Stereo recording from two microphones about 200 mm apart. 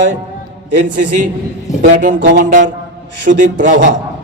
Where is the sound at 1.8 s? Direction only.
40° right (ahead or behind).